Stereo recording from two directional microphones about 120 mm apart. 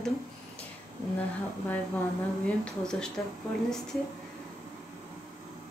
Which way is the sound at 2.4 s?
10° left (ahead or behind).